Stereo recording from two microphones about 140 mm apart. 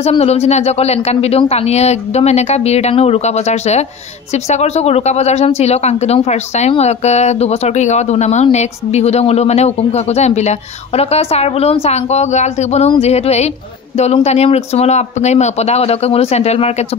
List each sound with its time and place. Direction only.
0.2 s speech: 50° left (ahead or behind)